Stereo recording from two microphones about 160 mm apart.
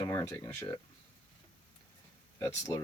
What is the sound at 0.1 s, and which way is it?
Speech, 15° left (ahead or behind).